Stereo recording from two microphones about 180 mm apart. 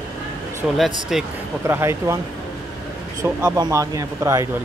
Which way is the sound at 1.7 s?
15° right (ahead or behind).